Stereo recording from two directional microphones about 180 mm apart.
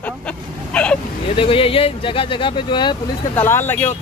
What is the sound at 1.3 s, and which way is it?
Speech, 30° left (ahead or behind).